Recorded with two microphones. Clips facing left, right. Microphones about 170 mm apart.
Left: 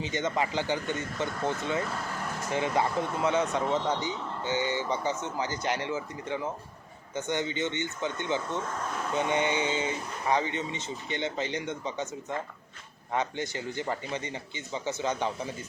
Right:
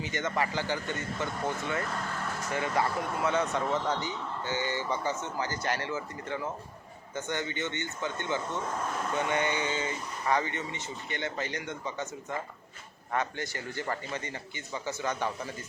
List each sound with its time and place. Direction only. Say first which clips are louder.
0.0 s speech: left 2 dB; 20° left (ahead or behind)
2.5 s speech: left 2 dB; 20° left (ahead or behind)
13.1 s speech: left 2 dB; 20° left (ahead or behind)